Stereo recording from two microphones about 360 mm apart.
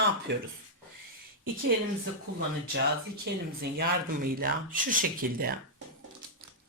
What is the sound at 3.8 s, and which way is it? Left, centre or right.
Speech, right.